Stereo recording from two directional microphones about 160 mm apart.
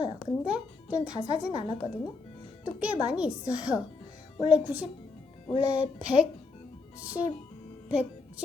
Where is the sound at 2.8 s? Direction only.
5° right (ahead or behind).